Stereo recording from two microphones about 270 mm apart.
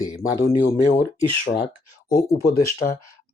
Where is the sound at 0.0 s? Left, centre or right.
Centre.